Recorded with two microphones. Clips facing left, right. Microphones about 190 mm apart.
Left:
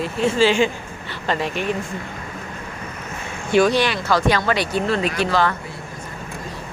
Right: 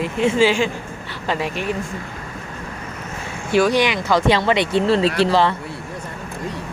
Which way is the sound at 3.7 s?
15° right (ahead or behind).